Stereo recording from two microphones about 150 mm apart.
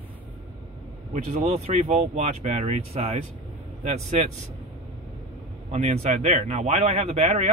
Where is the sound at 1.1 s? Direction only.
50° right (ahead or behind).